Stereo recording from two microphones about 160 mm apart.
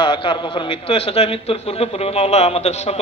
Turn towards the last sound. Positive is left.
turn(degrees=40)  # may be behind; listen again after turning